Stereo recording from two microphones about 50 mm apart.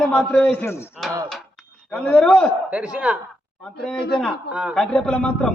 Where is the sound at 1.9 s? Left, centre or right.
Left.